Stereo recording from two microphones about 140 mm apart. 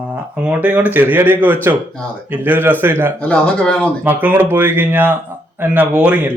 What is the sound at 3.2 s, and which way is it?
Speech, 10° left (ahead or behind).